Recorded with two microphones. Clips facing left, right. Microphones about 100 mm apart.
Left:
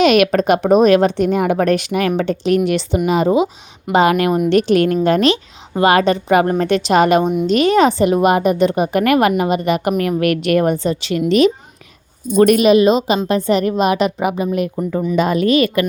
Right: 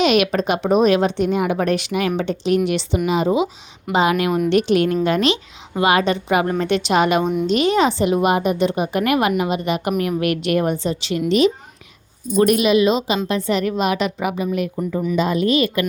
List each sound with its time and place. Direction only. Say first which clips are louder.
0.0 s a woman's voice: left 4 dB; 50° left (ahead or behind)